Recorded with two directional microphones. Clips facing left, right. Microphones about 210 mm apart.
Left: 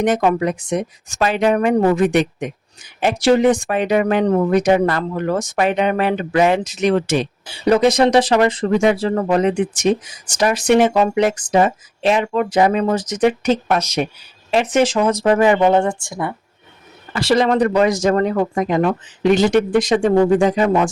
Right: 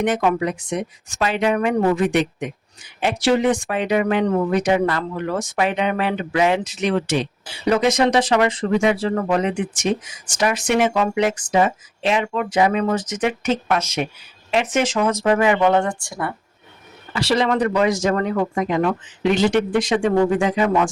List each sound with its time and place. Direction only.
0.0 s speech: 40° left (ahead or behind)
15.6 s speech: 25° left (ahead or behind)
17.2 s speech: 45° left (ahead or behind)